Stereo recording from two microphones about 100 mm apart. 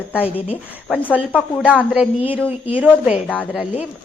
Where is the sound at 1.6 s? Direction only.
10° right (ahead or behind).